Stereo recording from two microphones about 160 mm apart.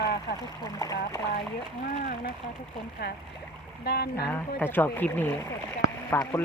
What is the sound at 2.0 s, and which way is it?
Speech, 55° left (ahead or behind).